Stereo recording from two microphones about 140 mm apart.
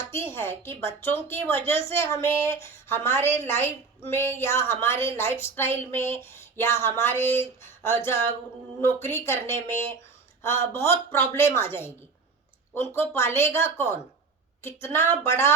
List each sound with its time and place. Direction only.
0.1 s a woman's voice: 20° left (ahead or behind)